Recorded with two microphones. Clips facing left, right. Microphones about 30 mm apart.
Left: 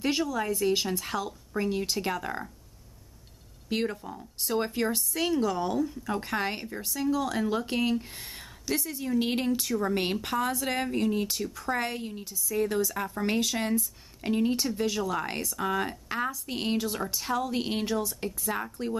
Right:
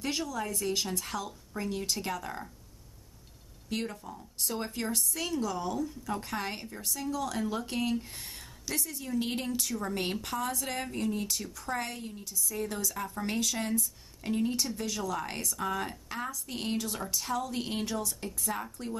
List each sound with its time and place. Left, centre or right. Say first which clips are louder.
0.3 s speech: left 6 dB; centre
3.6 s speech: left 5 dB; left